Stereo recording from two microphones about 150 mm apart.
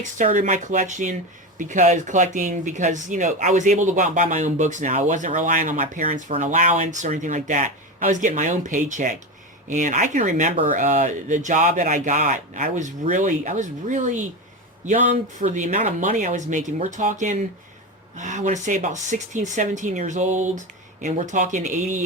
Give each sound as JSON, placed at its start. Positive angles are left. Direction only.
{"t": 0.0, "sound": "speech", "side_deg": -60}